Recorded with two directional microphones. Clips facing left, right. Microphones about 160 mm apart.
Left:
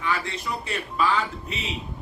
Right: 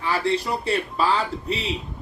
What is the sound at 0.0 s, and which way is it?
Speech, 35° right (ahead or behind).